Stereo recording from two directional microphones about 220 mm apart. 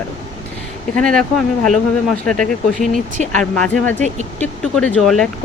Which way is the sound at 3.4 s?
5° left (ahead or behind).